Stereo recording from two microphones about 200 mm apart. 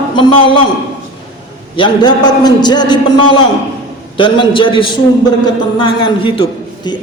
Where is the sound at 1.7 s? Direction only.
25° left (ahead or behind).